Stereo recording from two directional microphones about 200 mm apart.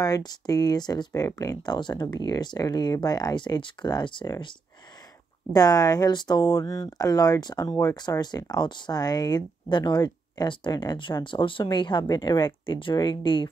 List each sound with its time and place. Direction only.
0.0 s speech: 20° left (ahead or behind)